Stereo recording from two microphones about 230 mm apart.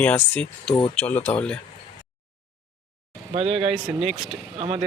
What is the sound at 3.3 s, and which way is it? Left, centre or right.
Speech, right.